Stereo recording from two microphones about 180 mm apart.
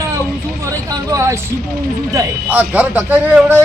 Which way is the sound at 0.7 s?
20° right (ahead or behind).